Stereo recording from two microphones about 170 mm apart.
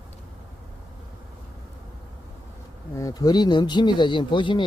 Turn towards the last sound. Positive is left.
turn(degrees=30)  # may be behind; listen again after turning